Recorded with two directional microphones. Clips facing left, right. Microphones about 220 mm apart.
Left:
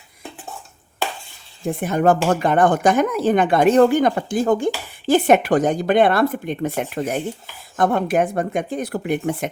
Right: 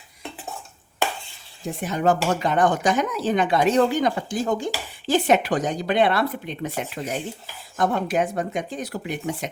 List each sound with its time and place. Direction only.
1.6 s speech: 55° left (ahead or behind)